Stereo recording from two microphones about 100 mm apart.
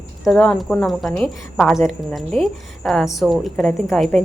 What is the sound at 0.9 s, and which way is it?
Speech, centre (ahead or behind).